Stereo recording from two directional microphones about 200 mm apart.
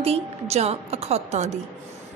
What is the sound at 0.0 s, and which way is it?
A woman's voice, 30° right (ahead or behind).